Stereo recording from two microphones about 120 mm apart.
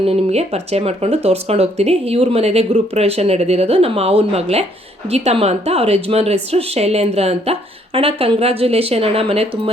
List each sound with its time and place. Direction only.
0.0 s speech: 60° right (ahead or behind)